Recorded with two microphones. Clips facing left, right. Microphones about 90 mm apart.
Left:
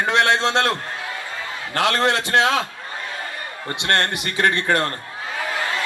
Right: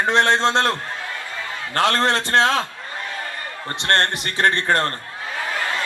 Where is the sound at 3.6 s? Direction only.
35° right (ahead or behind).